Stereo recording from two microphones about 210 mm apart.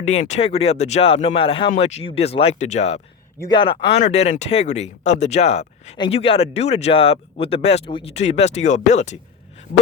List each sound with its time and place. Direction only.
0.0 s speech: 35° left (ahead or behind)